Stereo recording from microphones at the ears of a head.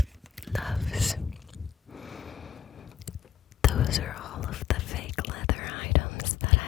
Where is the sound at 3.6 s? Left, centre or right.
Left.